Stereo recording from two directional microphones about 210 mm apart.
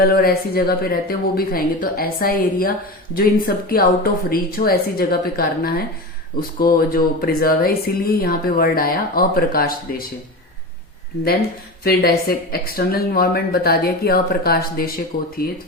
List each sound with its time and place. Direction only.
0.0 s speech: 45° left (ahead or behind)
11.8 s speech: 50° left (ahead or behind)